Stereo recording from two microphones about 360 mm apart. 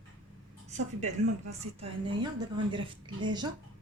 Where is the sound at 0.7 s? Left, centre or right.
Centre.